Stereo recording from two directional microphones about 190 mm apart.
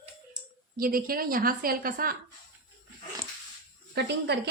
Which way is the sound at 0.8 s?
50° right (ahead or behind).